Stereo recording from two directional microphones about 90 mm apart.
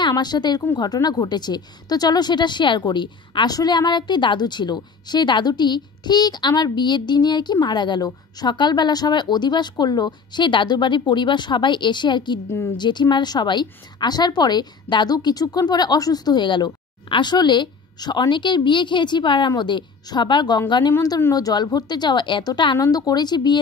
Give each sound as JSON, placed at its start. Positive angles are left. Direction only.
{"t": 0.0, "sound": "a woman's voice", "side_deg": 50}
{"t": 12.4, "sound": "a woman's voice", "side_deg": 30}
{"t": 12.7, "sound": "a woman's voice", "side_deg": 55}
{"t": 21.3, "sound": "a woman's voice", "side_deg": 45}
{"t": 22.8, "sound": "a woman's voice", "side_deg": 45}